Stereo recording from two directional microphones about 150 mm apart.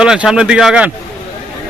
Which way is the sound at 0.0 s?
5° right (ahead or behind).